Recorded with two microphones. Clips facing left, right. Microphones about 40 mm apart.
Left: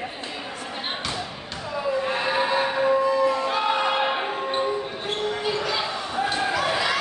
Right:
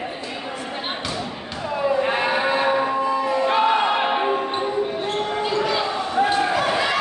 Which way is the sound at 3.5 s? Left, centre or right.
Right.